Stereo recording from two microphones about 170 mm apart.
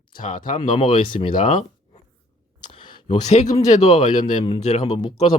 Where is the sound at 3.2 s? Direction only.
40° left (ahead or behind).